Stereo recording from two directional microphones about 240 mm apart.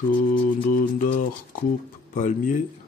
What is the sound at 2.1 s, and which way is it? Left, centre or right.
Speech, left.